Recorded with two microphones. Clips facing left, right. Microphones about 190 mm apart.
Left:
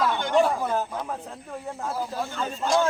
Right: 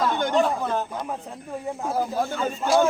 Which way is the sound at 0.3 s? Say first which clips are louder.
Left 3 dB; 10° left (ahead or behind).